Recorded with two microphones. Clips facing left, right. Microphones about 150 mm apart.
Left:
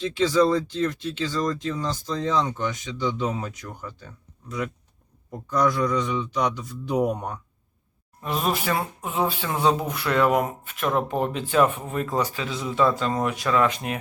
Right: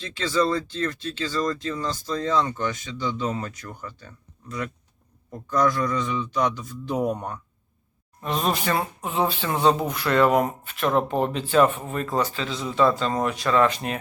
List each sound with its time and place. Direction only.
0.0 s speech: 15° left (ahead or behind)
8.2 s speech: 5° left (ahead or behind)